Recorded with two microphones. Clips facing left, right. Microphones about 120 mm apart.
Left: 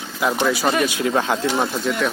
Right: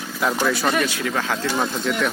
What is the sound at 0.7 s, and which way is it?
Speech, 15° left (ahead or behind).